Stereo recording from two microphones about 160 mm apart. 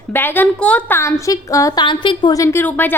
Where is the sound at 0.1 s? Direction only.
15° left (ahead or behind).